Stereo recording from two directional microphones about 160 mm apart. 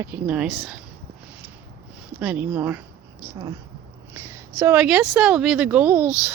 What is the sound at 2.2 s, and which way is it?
A woman's voice, 10° right (ahead or behind).